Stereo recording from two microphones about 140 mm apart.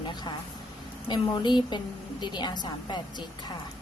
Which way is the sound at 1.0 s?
30° left (ahead or behind).